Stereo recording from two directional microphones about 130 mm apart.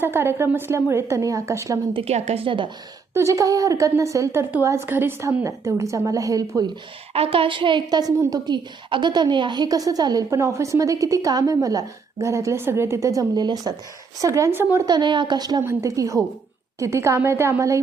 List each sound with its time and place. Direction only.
0.0 s a woman's voice: 20° right (ahead or behind)
1.9 s a woman's voice: 50° right (ahead or behind)
3.2 s a woman's voice: 25° right (ahead or behind)
7.1 s a woman's voice: 50° right (ahead or behind); by 14.8 s 15° right (ahead or behind)
14.8 s a woman's voice: 35° right (ahead or behind)